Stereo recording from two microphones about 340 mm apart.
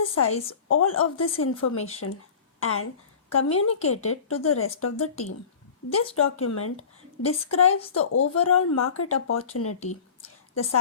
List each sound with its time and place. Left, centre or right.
0.1 s a woman's voice: left
9.8 s a sound: centre
10.5 s a woman's voice: left